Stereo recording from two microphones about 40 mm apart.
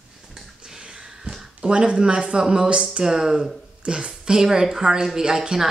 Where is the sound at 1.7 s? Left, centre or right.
Right.